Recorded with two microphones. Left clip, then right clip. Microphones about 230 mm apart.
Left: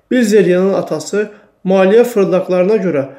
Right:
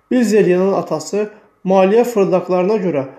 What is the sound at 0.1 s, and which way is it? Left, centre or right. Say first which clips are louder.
Speech: left 3 dB; centre.